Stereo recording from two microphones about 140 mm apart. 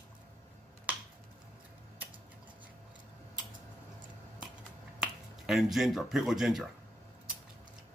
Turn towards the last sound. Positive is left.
turn(degrees=0)  # may be behind; listen again after turning